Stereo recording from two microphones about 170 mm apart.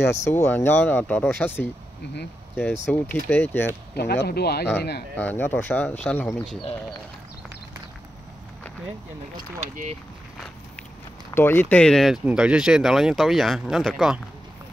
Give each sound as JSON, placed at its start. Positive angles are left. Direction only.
{"t": 0.0, "sound": "speech", "side_deg": 15}
{"t": 3.9, "sound": "speech", "side_deg": 70}
{"t": 5.1, "sound": "speech", "side_deg": 10}
{"t": 9.6, "sound": "speech", "side_deg": -40}
{"t": 11.3, "sound": "speech", "side_deg": 10}